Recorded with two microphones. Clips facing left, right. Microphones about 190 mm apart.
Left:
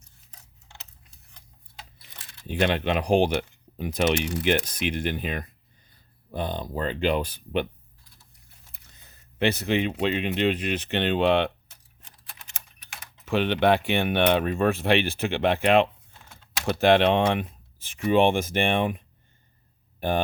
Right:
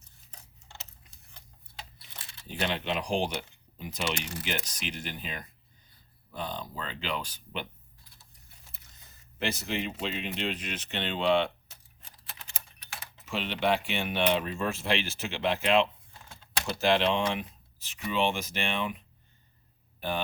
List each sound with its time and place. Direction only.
2.5 s speech: 60° left (ahead or behind)
8.9 s speech: 60° left (ahead or behind)
13.2 s speech: 60° left (ahead or behind)